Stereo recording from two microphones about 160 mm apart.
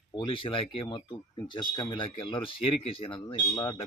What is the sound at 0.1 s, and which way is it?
Speech, 30° left (ahead or behind).